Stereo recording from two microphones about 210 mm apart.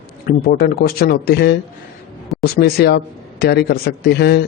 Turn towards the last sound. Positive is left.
turn(degrees=50)  # may be behind; listen again after turning